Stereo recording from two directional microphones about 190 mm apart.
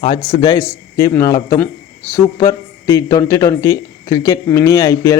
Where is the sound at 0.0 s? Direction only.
25° left (ahead or behind).